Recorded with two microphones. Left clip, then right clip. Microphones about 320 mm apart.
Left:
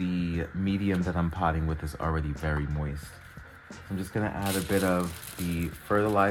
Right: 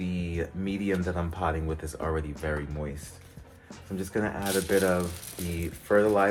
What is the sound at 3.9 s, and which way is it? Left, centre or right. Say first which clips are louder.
Speech: right 2 dB; left.